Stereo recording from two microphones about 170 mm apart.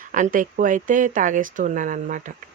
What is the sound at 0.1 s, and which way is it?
Speech, 50° right (ahead or behind).